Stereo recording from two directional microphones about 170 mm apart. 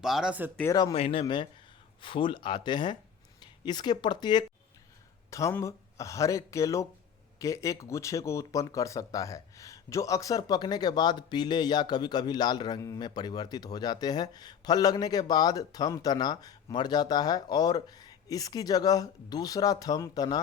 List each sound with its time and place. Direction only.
0.0 s speech: 5° right (ahead or behind)
0.7 s speech: 20° left (ahead or behind)
0.9 s speech: 35° left (ahead or behind)